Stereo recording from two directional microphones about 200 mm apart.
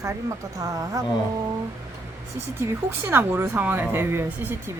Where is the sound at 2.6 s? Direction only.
10° right (ahead or behind).